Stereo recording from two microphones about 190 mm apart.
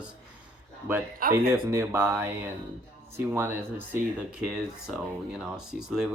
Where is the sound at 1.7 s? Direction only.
10° right (ahead or behind).